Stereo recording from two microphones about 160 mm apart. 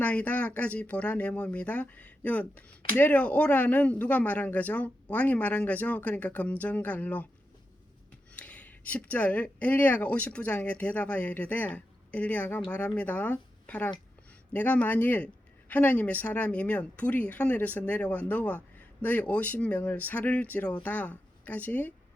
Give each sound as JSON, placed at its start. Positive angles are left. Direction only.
{"t": 0.0, "sound": "speech", "side_deg": 10}
{"t": 8.3, "sound": "speech", "side_deg": 10}